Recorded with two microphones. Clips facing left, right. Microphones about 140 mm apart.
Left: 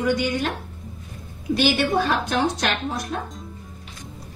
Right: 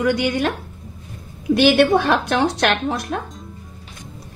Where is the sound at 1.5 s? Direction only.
65° right (ahead or behind).